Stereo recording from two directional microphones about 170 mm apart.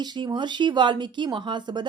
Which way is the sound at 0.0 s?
25° right (ahead or behind).